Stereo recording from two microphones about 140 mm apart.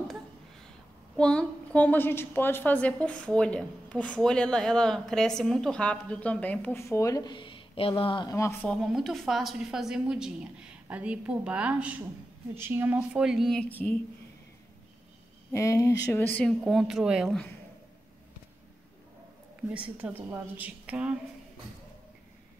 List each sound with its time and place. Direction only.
1.1 s a woman's voice: 5° left (ahead or behind); by 8.3 s 35° left (ahead or behind)
8.3 s speech: 20° left (ahead or behind)
8.6 s a woman's voice: centre (ahead or behind)
15.5 s a woman's voice: 20° left (ahead or behind); by 17.4 s 5° right (ahead or behind)
20.0 s a woman's voice: 15° right (ahead or behind)